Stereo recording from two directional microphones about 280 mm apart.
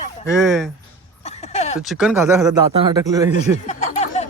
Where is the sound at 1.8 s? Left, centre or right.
Centre.